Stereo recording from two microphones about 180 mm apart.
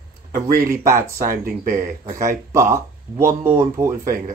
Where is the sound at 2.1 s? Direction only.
15° right (ahead or behind).